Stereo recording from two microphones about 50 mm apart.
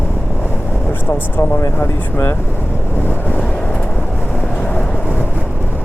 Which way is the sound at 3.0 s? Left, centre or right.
Left.